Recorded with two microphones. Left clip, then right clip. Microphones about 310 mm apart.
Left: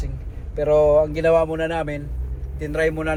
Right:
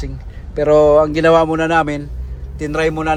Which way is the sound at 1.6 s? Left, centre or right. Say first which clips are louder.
Right 9 dB; centre.